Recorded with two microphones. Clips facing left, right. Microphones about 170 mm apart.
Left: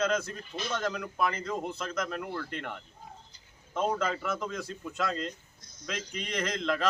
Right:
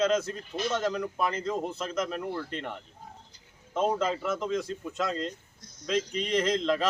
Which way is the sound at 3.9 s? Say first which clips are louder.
Right 3 dB; 25° right (ahead or behind).